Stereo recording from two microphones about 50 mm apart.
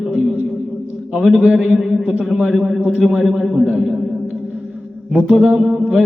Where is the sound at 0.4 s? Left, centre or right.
Centre.